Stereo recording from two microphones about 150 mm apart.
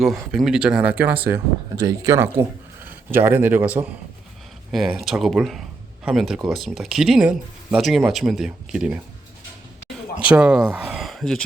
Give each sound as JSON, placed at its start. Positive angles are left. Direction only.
{"t": 0.0, "sound": "speech", "side_deg": 0}
{"t": 4.7, "sound": "speech", "side_deg": 0}
{"t": 10.3, "sound": "speech", "side_deg": -5}